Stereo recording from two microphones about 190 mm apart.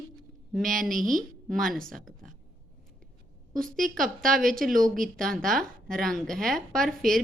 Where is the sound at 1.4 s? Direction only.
Centre (ahead or behind).